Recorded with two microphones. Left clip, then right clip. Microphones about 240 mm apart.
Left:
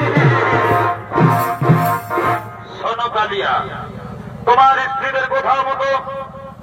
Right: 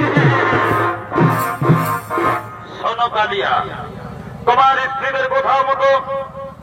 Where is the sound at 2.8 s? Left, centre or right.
Right.